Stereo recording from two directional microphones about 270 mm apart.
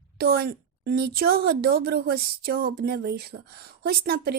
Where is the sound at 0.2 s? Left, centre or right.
Right.